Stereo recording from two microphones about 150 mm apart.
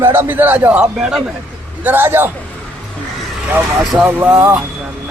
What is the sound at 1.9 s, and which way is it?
Speech, 15° right (ahead or behind).